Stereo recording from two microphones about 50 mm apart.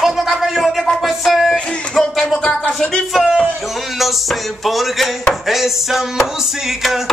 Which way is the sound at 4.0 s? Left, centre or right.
Centre.